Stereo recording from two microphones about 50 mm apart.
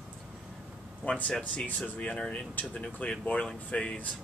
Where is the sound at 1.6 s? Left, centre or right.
Left.